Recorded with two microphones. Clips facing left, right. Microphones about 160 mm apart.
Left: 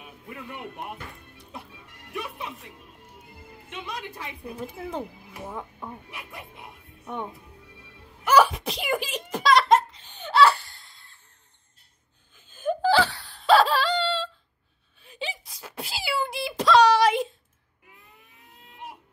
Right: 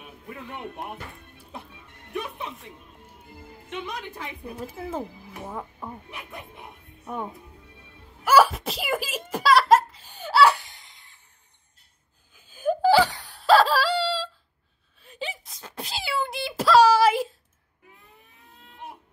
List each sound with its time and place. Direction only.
2.3 s speech: centre (ahead or behind)
3.7 s a woman's voice: 55° right (ahead or behind)
4.6 s speech: 5° right (ahead or behind)
6.0 s speech: 55° right (ahead or behind)
7.1 s speech: 5° right (ahead or behind)
8.2 s a sound: 5° right (ahead or behind)
9.3 s laughter: 5° right (ahead or behind)
12.4 s wail: 10° right (ahead or behind)
13.4 s wail: centre (ahead or behind)